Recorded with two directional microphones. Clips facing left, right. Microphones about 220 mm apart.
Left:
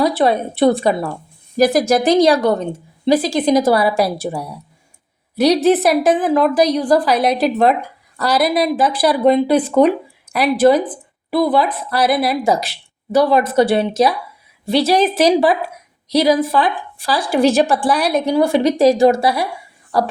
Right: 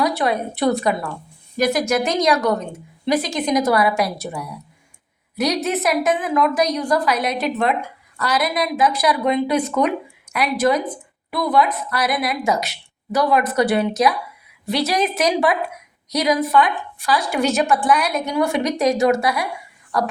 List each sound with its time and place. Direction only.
0.0 s a woman's voice: 30° left (ahead or behind)